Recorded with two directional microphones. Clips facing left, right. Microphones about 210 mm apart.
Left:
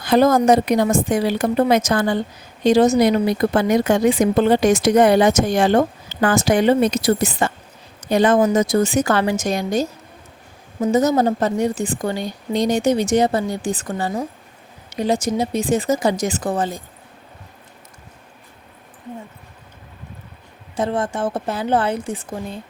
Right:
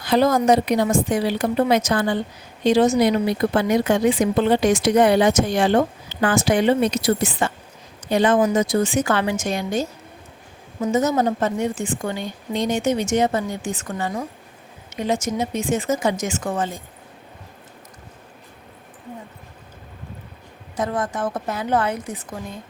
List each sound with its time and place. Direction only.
0.0 s a woman's voice: 50° left (ahead or behind)
20.7 s a woman's voice: 30° left (ahead or behind)